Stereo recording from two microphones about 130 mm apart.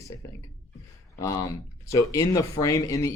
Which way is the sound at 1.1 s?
25° left (ahead or behind).